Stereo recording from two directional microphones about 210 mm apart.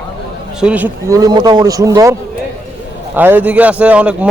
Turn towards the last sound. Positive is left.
turn(degrees=-5)  # may be behind; listen again after turning